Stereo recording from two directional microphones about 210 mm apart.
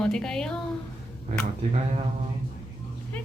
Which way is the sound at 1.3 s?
35° right (ahead or behind).